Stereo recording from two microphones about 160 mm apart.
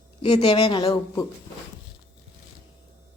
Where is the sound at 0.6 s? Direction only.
25° left (ahead or behind).